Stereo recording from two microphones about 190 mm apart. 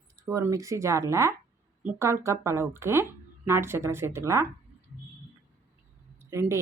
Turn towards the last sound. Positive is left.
turn(degrees=-15)  # may be behind; listen again after turning